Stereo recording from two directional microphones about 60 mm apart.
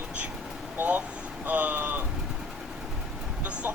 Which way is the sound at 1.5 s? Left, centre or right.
Right.